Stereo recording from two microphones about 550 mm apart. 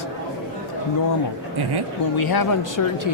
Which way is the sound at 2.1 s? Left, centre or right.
Left.